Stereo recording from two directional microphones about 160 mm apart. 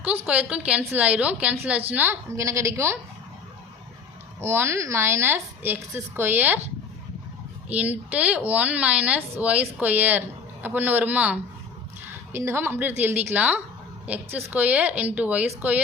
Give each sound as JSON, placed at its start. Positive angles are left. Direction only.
{"t": 0.0, "sound": "speech", "side_deg": -10}
{"t": 4.4, "sound": "speech", "side_deg": -15}
{"t": 7.7, "sound": "speech", "side_deg": -10}